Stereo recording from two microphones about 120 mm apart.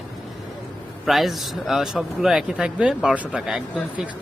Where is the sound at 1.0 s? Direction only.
Centre (ahead or behind).